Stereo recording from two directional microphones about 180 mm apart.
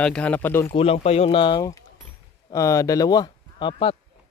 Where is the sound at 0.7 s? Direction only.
30° left (ahead or behind).